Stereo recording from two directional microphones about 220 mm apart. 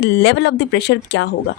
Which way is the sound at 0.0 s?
55° left (ahead or behind).